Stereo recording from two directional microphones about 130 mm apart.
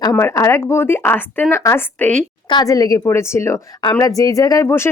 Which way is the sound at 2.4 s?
30° left (ahead or behind).